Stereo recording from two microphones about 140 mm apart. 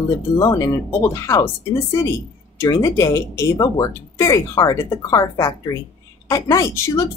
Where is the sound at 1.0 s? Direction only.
20° left (ahead or behind).